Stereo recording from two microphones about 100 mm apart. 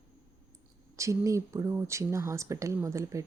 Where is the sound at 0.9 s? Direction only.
30° right (ahead or behind).